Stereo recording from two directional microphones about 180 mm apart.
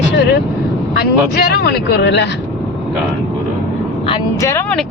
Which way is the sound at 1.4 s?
65° left (ahead or behind).